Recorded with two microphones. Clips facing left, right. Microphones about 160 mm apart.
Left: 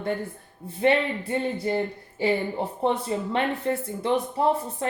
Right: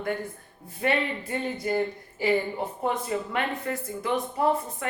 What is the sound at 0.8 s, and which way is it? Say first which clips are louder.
Speech: left 5 dB; 30° left (ahead or behind).